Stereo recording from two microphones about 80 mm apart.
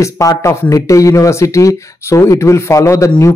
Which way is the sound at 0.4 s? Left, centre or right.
Left.